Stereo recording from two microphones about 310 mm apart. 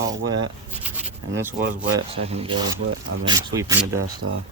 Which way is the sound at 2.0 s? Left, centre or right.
Centre.